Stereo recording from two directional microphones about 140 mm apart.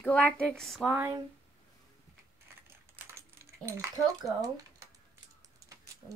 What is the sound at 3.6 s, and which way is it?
Speech, 20° right (ahead or behind).